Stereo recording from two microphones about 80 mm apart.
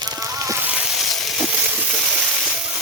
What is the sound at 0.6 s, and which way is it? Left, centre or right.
Sizzle, right.